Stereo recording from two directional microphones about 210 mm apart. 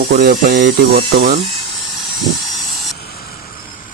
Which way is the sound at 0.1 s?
45° right (ahead or behind).